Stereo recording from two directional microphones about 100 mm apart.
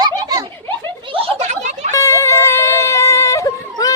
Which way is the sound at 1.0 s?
75° right (ahead or behind).